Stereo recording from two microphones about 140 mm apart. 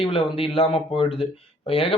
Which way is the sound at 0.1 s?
40° left (ahead or behind).